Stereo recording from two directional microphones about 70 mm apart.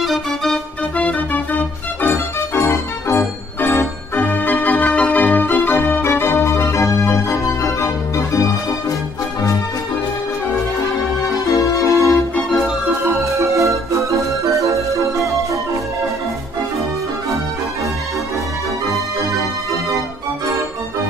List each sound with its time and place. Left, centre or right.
0.0 s organ: centre
0.9 s music: left
11.8 s music: left
13.2 s music: right
14.7 s organ: right